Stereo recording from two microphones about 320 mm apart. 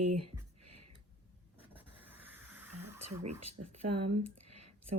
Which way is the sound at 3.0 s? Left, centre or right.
Right.